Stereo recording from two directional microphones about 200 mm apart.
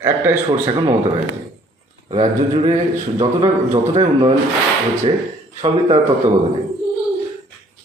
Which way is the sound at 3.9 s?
25° right (ahead or behind).